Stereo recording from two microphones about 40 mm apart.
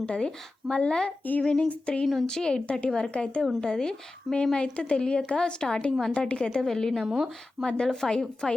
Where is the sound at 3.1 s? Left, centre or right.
Left.